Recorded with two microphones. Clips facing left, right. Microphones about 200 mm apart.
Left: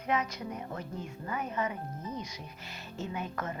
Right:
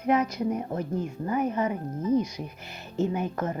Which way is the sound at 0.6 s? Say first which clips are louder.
Right 9 dB; 40° right (ahead or behind).